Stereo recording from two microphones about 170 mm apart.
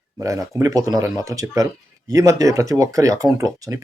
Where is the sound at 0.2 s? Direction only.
20° right (ahead or behind).